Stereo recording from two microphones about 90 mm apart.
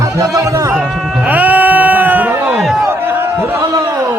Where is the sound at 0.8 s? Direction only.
5° right (ahead or behind).